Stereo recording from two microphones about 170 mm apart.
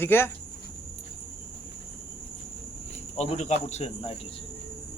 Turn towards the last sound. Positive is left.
turn(degrees=40)  # may be behind; listen again after turning